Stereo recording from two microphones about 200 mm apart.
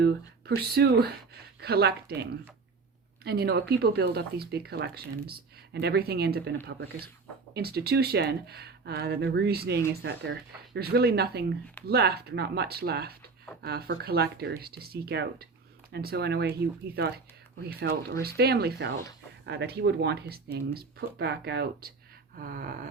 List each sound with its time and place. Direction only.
0.0 s speech: 55° right (ahead or behind)
3.2 s speech: 55° right (ahead or behind)